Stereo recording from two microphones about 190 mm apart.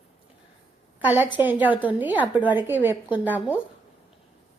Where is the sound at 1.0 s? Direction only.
10° right (ahead or behind).